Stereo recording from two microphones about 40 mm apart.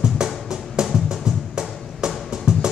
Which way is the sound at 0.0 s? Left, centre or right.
Centre.